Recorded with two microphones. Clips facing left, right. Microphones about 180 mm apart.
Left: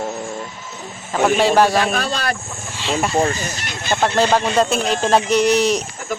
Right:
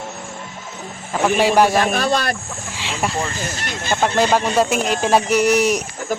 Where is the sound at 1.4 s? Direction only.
10° right (ahead or behind).